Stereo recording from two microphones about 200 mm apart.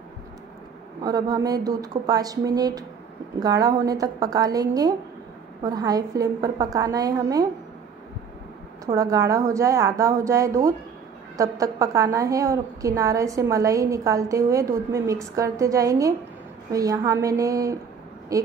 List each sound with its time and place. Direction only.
1.0 s a woman's voice: 20° right (ahead or behind)
8.8 s a woman's voice: 15° right (ahead or behind)